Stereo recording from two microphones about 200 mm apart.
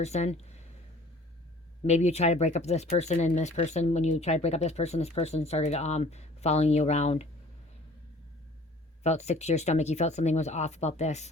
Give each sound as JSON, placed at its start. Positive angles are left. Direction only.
{"t": 0.0, "sound": "speech", "side_deg": 35}
{"t": 1.8, "sound": "speech", "side_deg": 35}
{"t": 9.0, "sound": "speech", "side_deg": 35}